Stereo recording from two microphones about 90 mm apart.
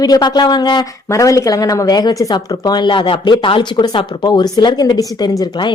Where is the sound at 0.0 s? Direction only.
50° left (ahead or behind).